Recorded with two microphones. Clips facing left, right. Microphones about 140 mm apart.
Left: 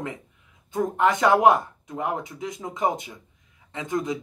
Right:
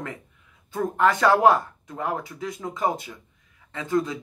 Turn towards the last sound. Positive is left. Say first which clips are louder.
# right 2 dB
turn(degrees=20)  # may be behind; listen again after turning